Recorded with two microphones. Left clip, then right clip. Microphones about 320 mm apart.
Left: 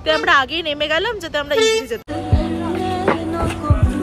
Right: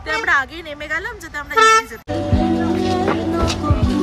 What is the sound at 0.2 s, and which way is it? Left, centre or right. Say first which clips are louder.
A woman's voice: left 3 dB; centre.